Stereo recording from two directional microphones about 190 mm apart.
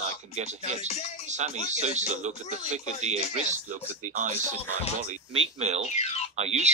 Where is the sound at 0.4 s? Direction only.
35° right (ahead or behind).